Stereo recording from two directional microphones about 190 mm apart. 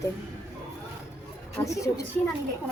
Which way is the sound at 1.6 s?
15° left (ahead or behind).